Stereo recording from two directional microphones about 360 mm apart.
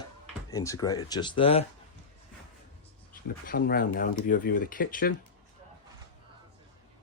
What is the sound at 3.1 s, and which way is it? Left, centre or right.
Speech, left.